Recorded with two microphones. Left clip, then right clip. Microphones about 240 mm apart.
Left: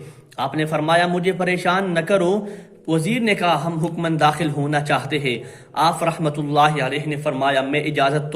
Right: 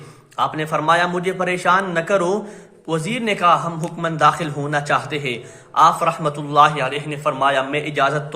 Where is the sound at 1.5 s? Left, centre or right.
Right.